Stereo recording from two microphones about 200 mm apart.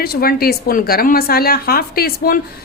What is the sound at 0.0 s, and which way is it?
A woman's voice, 50° left (ahead or behind).